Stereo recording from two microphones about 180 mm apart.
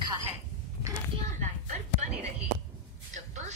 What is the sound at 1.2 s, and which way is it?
A woman's voice, 40° right (ahead or behind).